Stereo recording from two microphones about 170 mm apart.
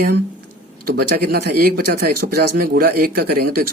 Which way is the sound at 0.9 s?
65° right (ahead or behind).